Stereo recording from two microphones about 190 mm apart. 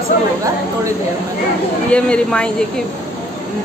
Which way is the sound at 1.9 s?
5° left (ahead or behind).